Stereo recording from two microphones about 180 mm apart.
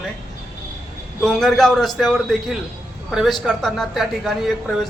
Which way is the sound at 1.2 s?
Centre (ahead or behind).